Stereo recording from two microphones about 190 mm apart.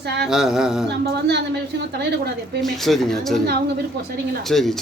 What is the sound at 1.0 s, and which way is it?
Speech, 60° right (ahead or behind).